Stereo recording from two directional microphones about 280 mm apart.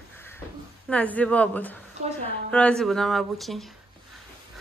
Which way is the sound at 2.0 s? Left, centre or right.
Right.